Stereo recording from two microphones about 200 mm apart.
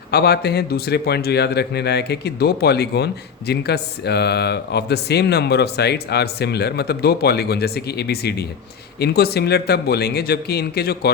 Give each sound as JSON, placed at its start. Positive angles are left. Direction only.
{"t": 0.1, "sound": "a man's voice", "side_deg": 55}